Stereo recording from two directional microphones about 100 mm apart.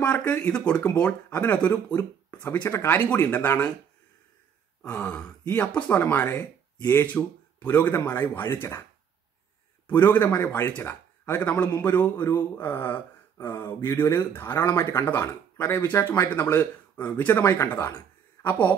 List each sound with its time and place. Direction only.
0.0 s speech: 15° left (ahead or behind)
4.8 s a man's voice: 10° left (ahead or behind)
9.8 s a man's voice: 20° left (ahead or behind)